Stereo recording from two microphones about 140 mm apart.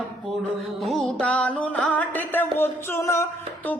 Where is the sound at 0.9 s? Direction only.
5° left (ahead or behind).